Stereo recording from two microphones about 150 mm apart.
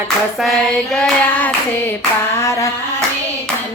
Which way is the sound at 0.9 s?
10° left (ahead or behind).